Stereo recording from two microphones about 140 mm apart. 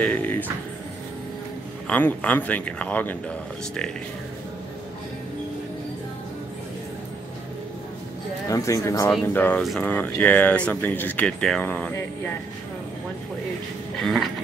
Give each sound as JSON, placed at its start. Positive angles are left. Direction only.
{"t": 0.0, "sound": "music", "side_deg": 10}
{"t": 1.9, "sound": "speech", "side_deg": 10}
{"t": 8.5, "sound": "speech", "side_deg": 25}
{"t": 14.0, "sound": "a sound", "side_deg": 0}